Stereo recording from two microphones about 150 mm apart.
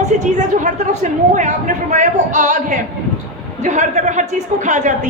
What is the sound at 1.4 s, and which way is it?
A man's voice, 50° right (ahead or behind).